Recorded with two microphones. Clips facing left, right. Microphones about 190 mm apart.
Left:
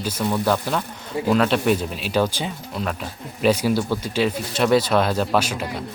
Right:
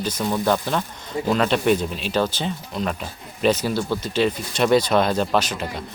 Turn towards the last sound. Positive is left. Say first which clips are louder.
# even
turn(degrees=10)  # may be behind; listen again after turning